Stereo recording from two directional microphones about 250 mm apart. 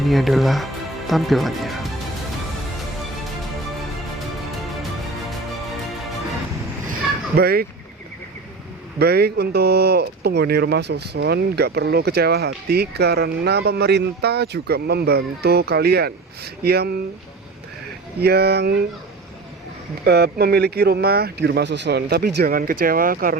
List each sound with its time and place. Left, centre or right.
0.0 s speech: centre
7.3 s speech: right
9.0 s speech: right
18.2 s speech: right
20.1 s speech: right